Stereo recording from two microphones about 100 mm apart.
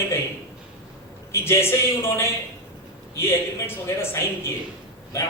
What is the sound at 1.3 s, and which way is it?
A man's voice, 25° left (ahead or behind).